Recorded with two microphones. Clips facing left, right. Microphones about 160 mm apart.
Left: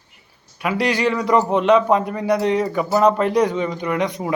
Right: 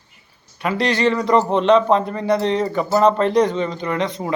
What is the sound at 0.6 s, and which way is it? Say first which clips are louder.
Speech: right 1 dB; 10° left (ahead or behind).